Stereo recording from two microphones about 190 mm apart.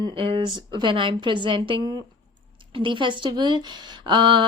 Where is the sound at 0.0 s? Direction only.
25° right (ahead or behind).